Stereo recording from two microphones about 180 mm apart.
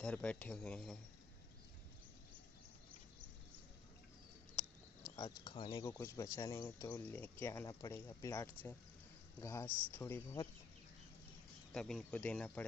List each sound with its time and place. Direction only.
0.0 s speech: 5° left (ahead or behind)
5.1 s speech: 25° left (ahead or behind)
11.7 s speech: 5° left (ahead or behind)